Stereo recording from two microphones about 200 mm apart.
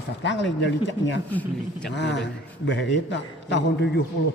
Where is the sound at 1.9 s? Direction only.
60° left (ahead or behind).